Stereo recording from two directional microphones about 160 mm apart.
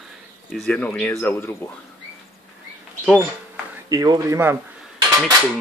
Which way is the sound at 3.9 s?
25° right (ahead or behind).